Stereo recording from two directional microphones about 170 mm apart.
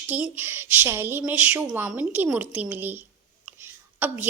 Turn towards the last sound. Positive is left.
turn(degrees=-10)  # may be behind; listen again after turning